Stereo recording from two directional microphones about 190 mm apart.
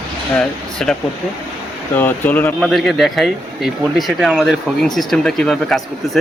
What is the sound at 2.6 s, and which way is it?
Speech, centre (ahead or behind).